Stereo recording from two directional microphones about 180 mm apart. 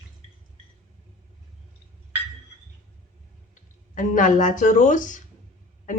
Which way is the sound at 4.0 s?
45° left (ahead or behind).